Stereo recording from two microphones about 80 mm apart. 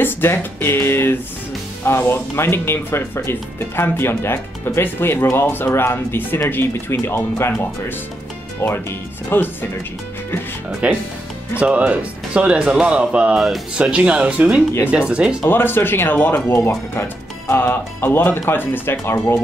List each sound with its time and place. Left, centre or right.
0.0 s speech: left
8.5 s speech: left
10.8 s speech: centre
15.5 s speech: left